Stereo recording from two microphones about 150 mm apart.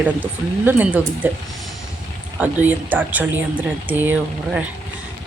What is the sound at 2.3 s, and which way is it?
Speech, 10° right (ahead or behind).